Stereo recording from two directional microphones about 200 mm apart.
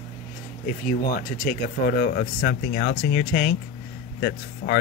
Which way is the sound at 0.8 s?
45° left (ahead or behind).